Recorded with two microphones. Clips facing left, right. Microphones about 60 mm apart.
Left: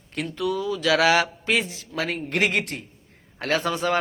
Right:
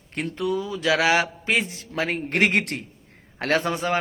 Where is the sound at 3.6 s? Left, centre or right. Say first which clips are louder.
Left 1 dB; right.